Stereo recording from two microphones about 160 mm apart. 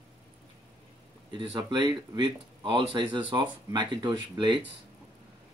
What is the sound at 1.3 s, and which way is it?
Speech, 30° right (ahead or behind).